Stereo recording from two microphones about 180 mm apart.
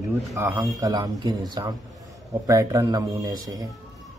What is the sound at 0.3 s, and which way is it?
A man's voice, 15° right (ahead or behind).